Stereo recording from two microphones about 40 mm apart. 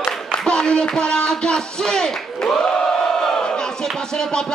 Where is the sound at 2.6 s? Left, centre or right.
Centre.